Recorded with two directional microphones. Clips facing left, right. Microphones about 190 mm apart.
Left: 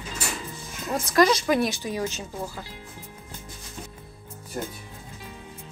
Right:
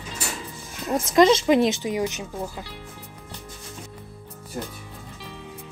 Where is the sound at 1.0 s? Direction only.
20° right (ahead or behind).